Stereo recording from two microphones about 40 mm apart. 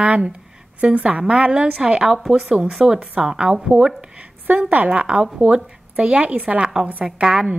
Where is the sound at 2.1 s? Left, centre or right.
Centre.